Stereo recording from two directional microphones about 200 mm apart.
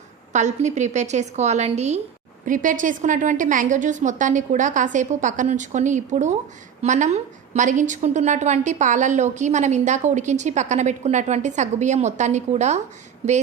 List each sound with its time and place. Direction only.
0.3 s a woman's voice: 35° right (ahead or behind)